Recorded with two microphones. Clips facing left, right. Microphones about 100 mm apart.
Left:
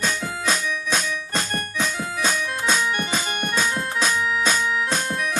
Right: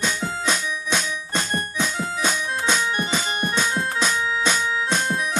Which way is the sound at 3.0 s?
30° right (ahead or behind).